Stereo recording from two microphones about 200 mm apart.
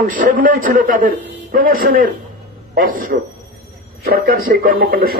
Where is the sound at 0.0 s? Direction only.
45° right (ahead or behind).